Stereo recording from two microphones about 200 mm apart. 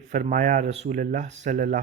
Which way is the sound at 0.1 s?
40° right (ahead or behind).